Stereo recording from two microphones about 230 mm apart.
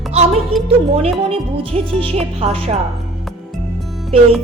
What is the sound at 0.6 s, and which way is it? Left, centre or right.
Music, right.